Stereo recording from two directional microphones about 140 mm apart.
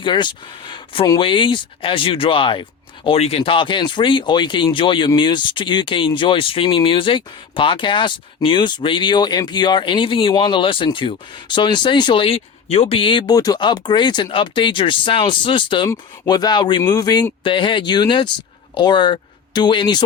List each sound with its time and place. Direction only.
0.0 s speech: 35° left (ahead or behind)